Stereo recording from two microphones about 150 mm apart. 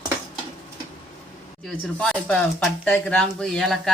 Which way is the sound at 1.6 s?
5° left (ahead or behind).